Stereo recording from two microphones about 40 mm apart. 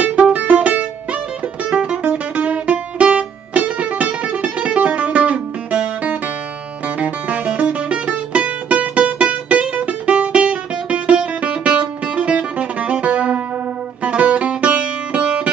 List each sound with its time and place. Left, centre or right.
0.0 s music: right
2.3 s music: right